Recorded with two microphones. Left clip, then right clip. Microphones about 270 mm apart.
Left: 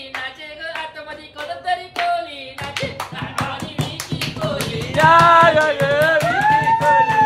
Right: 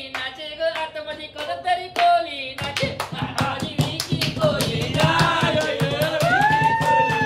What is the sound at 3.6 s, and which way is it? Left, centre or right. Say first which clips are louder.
Music: right 1 dB; centre.